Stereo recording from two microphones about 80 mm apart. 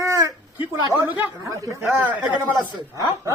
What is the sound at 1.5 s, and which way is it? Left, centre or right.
Speech, right.